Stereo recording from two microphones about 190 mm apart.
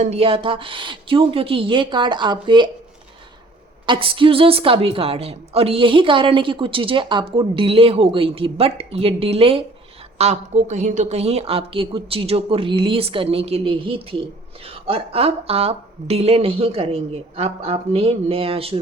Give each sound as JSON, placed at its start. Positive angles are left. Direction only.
{"t": 0.0, "sound": "a woman's voice", "side_deg": -30}
{"t": 3.8, "sound": "a woman's voice", "side_deg": -25}